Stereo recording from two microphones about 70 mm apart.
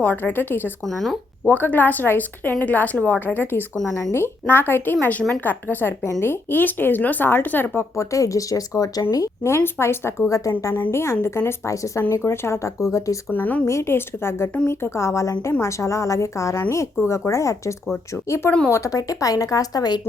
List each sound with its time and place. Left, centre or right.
0.0 s a woman's voice: left
0.9 s speech: centre
1.5 s a woman's voice: left
6.2 s a woman's voice: left
7.9 s speech: left
9.6 s speech: left
10.9 s speech: left
11.7 s speech: left
12.1 s speech: left
13.3 s a woman's voice: left
13.7 s a woman's voice: left